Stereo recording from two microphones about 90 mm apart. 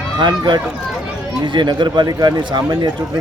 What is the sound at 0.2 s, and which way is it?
Speech, 55° right (ahead or behind).